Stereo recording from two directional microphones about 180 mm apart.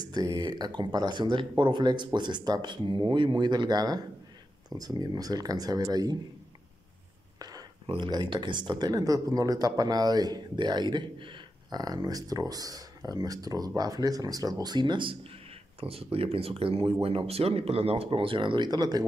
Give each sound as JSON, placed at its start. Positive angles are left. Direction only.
{"t": 0.0, "sound": "speech", "side_deg": -20}
{"t": 7.3, "sound": "speech", "side_deg": -20}